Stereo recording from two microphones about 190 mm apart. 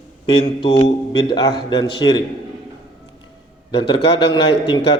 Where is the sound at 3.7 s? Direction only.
25° left (ahead or behind).